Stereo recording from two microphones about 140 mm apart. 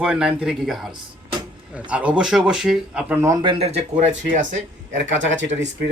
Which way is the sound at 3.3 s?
35° right (ahead or behind).